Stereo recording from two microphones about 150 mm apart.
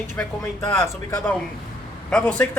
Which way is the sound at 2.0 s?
10° left (ahead or behind).